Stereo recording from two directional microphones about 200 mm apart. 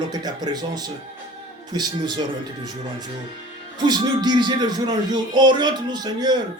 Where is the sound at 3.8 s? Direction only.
20° right (ahead or behind).